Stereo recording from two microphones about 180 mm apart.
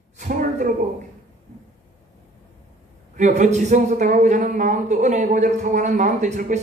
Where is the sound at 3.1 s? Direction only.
40° right (ahead or behind).